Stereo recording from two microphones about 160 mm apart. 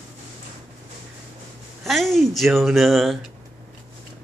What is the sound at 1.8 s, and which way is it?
Speech, centre (ahead or behind).